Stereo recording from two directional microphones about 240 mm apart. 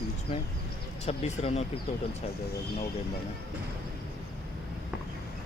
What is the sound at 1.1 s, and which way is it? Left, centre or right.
Speech, left.